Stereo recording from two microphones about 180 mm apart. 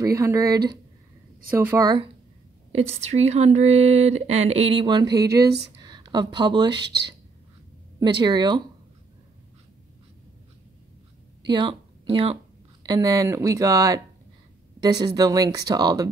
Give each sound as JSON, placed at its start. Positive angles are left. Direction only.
{"t": 0.0, "sound": "speech", "side_deg": -15}
{"t": 2.7, "sound": "speech", "side_deg": -35}
{"t": 8.0, "sound": "speech", "side_deg": -25}
{"t": 11.4, "sound": "speech", "side_deg": -25}
{"t": 12.8, "sound": "speech", "side_deg": -20}